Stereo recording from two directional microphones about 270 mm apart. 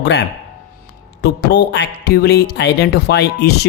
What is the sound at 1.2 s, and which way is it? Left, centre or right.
Speech, left.